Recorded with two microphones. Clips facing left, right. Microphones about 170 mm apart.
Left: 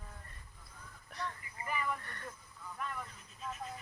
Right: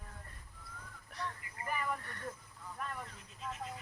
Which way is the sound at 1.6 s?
45° right (ahead or behind).